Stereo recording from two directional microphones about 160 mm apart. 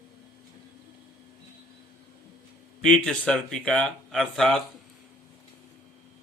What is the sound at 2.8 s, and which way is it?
Speech, 5° left (ahead or behind).